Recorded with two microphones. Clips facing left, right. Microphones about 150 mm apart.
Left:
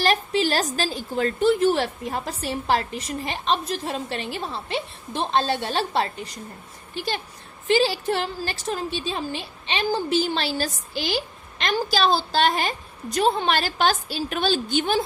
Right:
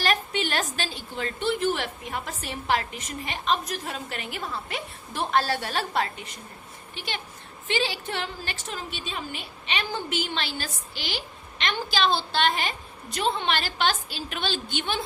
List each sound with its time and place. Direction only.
0.0 s a woman's voice: 35° left (ahead or behind)